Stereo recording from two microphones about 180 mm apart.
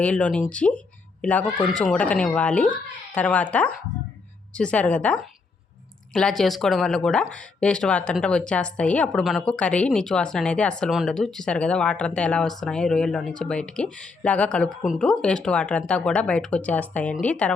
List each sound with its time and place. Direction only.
0.0 s speech: 5° left (ahead or behind)